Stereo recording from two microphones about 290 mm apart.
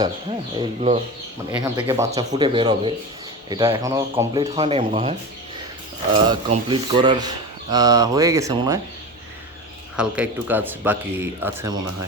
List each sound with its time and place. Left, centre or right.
0.0 s speech: centre
1.7 s speech: centre
6.2 s speech: centre
9.9 s speech: centre